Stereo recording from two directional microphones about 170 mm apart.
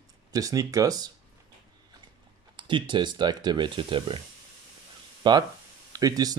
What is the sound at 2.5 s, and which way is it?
Speech, 30° right (ahead or behind).